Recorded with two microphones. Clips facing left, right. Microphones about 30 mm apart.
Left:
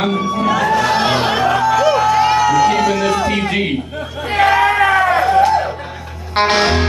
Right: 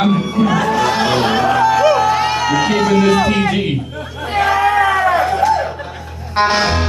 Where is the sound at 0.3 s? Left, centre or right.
Centre.